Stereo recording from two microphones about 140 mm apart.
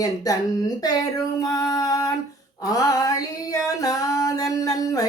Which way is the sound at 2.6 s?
25° left (ahead or behind).